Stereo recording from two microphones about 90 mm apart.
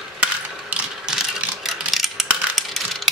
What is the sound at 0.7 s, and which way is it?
Ratchet, 10° right (ahead or behind).